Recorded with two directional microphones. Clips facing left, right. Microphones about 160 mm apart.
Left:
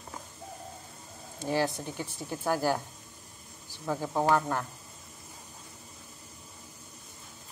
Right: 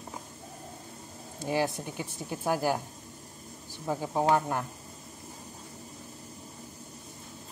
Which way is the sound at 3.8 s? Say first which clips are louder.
Right 1 dB; 15° right (ahead or behind).